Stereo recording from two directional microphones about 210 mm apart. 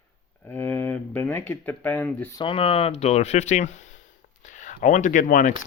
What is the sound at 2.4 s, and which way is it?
Speech, 25° left (ahead or behind).